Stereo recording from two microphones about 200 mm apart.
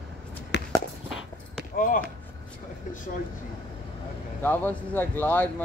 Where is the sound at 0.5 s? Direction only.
55° left (ahead or behind).